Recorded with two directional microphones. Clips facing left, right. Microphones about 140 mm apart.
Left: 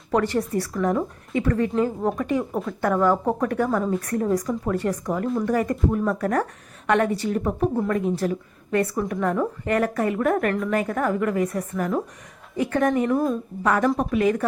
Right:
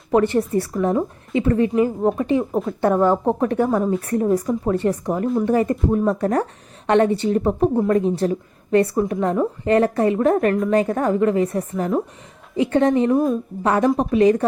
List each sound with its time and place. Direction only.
0.1 s a woman's voice: 20° right (ahead or behind)